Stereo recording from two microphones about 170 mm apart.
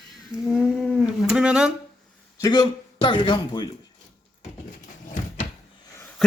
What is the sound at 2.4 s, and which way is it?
Speech, 20° left (ahead or behind).